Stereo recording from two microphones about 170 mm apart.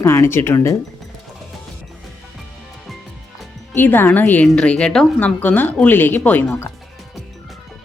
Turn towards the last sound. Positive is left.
turn(degrees=5)  # may be behind; listen again after turning